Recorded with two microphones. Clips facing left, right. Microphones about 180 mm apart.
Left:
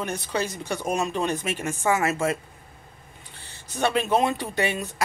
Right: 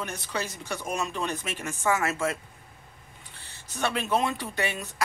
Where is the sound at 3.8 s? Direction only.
20° left (ahead or behind).